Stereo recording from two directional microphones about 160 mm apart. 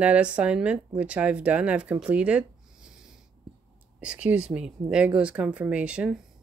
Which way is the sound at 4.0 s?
5° right (ahead or behind).